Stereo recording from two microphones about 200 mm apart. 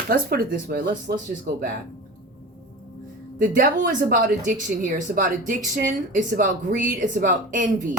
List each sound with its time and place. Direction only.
0.1 s a woman's voice: 45° right (ahead or behind)
3.3 s a woman's voice: 45° right (ahead or behind)